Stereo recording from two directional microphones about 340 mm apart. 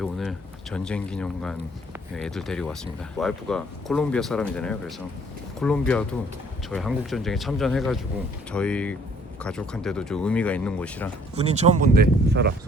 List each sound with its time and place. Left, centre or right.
0.0 s speech: centre
11.3 s speech: centre